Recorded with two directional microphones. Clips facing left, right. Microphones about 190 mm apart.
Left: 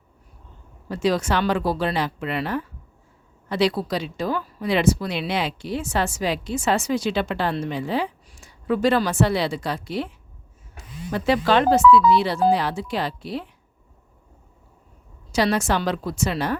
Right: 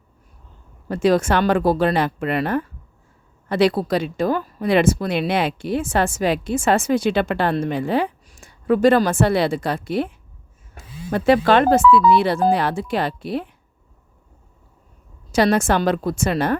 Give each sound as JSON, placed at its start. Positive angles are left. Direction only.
{"t": 0.9, "sound": "speech", "side_deg": -50}
{"t": 11.1, "sound": "speech", "side_deg": -55}
{"t": 15.3, "sound": "speech", "side_deg": -50}